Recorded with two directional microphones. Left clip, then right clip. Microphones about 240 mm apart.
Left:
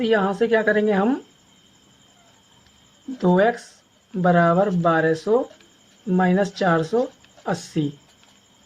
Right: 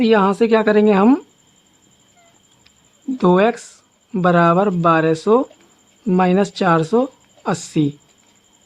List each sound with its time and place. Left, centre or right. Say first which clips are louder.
0.0 s speech: right 5 dB; right
3.2 s speech: right 4 dB; right